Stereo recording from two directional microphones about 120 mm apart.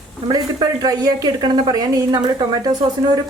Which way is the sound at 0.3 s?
35° right (ahead or behind).